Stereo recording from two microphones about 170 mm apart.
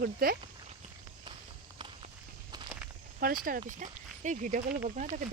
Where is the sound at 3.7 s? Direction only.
45° right (ahead or behind).